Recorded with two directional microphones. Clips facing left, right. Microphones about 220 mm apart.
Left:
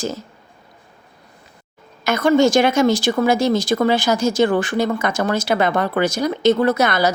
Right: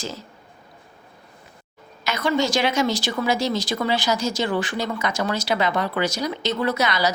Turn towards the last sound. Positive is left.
turn(degrees=50)  # may be behind; listen again after turning